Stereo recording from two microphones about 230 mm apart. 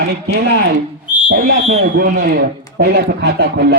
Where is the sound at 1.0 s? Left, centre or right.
Left.